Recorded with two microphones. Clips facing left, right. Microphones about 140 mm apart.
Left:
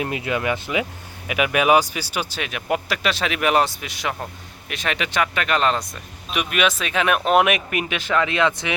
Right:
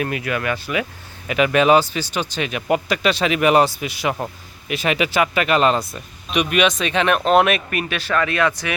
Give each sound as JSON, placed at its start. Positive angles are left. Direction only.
{"t": 0.0, "sound": "speech", "side_deg": 20}
{"t": 1.3, "sound": "speech", "side_deg": 10}